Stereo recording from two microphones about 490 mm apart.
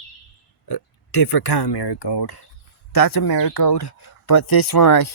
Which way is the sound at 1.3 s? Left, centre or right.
Left.